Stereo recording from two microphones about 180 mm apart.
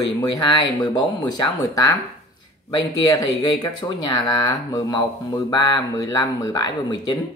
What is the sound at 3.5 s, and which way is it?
Speech, 25° left (ahead or behind).